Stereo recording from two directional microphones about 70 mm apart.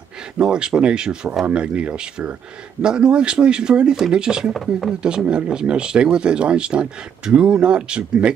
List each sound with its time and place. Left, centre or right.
0.4 s speech: centre
4.6 s speech: centre
5.0 s speech: centre